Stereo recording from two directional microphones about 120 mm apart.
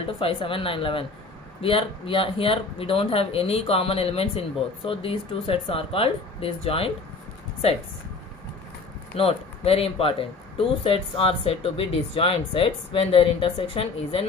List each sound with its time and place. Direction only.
0.2 s speech: 50° left (ahead or behind)
9.1 s speech: 55° left (ahead or behind)